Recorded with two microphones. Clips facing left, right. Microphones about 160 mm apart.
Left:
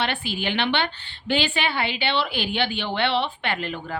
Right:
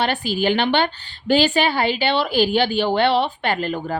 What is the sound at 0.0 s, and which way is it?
A woman's voice, 40° right (ahead or behind).